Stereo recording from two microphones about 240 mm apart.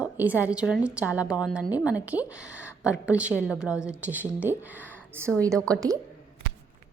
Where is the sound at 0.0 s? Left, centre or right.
Centre.